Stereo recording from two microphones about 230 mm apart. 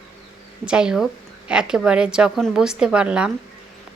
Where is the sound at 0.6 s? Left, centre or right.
Centre.